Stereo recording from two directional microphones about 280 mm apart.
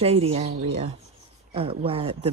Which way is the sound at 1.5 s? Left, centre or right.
Centre.